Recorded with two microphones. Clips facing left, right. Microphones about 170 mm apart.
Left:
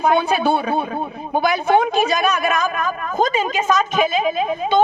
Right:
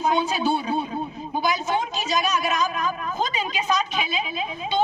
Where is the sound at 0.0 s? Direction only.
60° left (ahead or behind).